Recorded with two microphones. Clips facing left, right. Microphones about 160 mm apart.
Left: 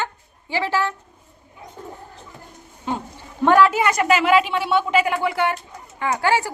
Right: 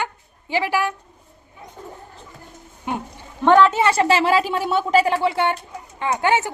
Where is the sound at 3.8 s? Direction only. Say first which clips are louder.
Right 1 dB; 30° right (ahead or behind).